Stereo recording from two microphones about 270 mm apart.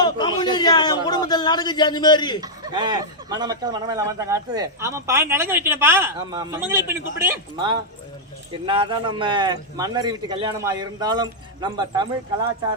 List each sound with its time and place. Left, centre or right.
0.0 s a man's voice: centre
2.4 s a man's voice: centre